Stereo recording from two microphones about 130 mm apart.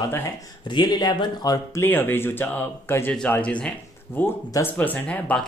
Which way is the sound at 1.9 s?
15° left (ahead or behind).